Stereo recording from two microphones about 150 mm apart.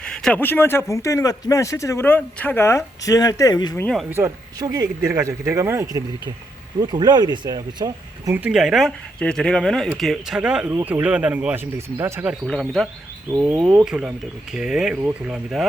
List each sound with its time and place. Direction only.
0.0 s speech: 5° left (ahead or behind); by 3.8 s 25° left (ahead or behind)
4.1 s speech: 20° right (ahead or behind)
6.7 s speech: 25° right (ahead or behind)
8.4 s speech: 5° right (ahead or behind)
12.5 s speech: 5° left (ahead or behind)